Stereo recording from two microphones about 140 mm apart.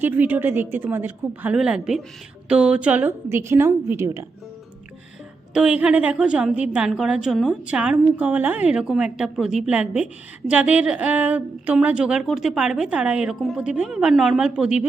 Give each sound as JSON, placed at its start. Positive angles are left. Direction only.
{"t": 0.0, "sound": "a woman's voice", "side_deg": -15}
{"t": 5.5, "sound": "a woman's voice", "side_deg": -10}